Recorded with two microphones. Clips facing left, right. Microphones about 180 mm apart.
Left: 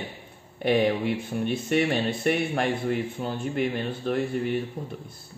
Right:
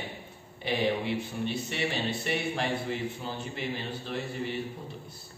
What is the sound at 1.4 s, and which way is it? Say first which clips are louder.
A man's voice: left 10 dB; 50° left (ahead or behind).